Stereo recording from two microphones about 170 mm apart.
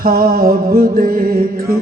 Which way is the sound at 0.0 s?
60° right (ahead or behind).